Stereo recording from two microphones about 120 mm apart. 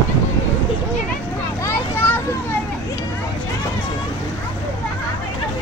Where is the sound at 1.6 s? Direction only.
20° left (ahead or behind).